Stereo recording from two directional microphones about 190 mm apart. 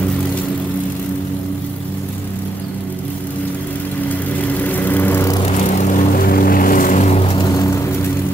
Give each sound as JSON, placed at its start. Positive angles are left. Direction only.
{"t": 4.6, "sound": "vehicle", "side_deg": 10}
{"t": 5.5, "sound": "vehicle", "side_deg": 40}